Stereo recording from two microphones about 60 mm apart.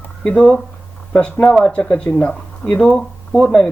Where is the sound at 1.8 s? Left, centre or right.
Left.